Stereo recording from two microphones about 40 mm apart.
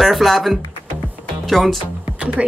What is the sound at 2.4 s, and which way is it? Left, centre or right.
Speech, right.